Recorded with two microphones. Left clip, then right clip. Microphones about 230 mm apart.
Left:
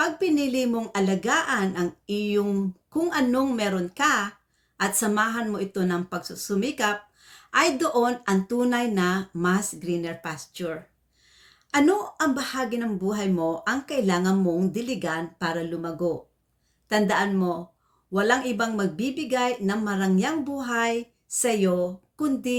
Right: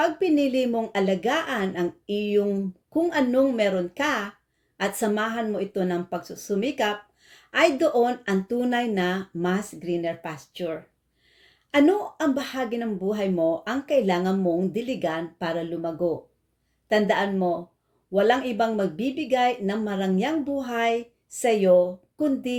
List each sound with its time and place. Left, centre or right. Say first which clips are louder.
0.0 s speech: right 2 dB; centre